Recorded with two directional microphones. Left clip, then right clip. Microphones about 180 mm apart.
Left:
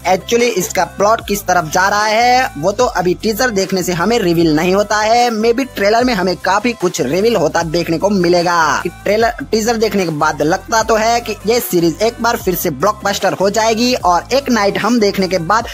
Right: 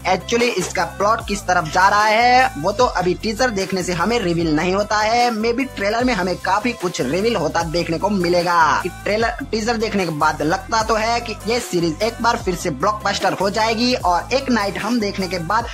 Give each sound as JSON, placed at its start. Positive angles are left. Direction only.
{"t": 0.0, "sound": "speech", "side_deg": 40}